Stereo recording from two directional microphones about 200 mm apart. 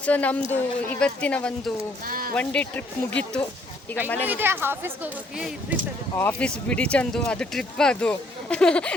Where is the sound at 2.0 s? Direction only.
45° right (ahead or behind).